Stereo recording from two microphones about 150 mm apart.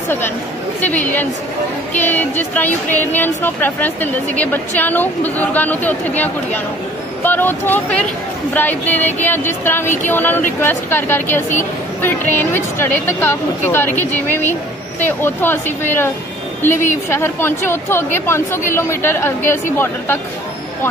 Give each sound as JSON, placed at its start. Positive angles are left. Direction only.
{"t": 2.0, "sound": "speech", "side_deg": 10}